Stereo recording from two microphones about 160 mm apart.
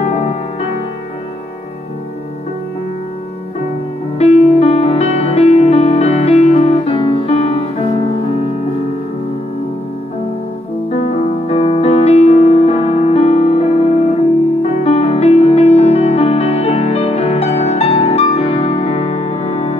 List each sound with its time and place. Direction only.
4.2 s music: 45° left (ahead or behind)
11.4 s music: 40° left (ahead or behind)